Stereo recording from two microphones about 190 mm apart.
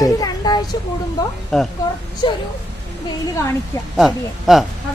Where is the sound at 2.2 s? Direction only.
25° left (ahead or behind).